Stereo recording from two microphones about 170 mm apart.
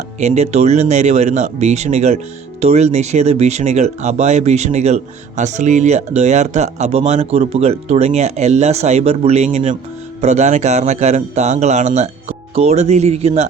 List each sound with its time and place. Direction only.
0.2 s speech: 40° right (ahead or behind)